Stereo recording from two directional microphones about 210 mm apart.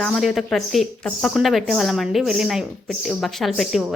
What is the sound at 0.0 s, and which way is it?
A woman's voice, centre (ahead or behind).